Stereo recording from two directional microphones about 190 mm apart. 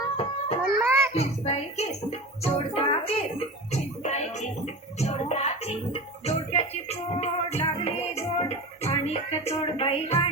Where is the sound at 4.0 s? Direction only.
35° left (ahead or behind).